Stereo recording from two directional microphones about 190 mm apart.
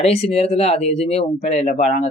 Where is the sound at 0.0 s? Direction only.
30° left (ahead or behind).